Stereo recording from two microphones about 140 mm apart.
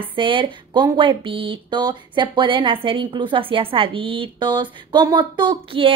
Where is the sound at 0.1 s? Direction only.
40° right (ahead or behind).